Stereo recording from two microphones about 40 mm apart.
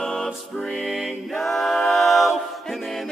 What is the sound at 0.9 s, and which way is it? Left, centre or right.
A capella, centre.